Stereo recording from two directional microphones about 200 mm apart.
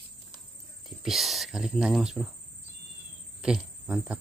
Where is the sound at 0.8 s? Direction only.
Centre (ahead or behind).